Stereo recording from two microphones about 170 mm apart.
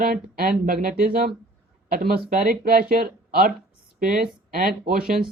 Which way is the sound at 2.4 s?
60° right (ahead or behind).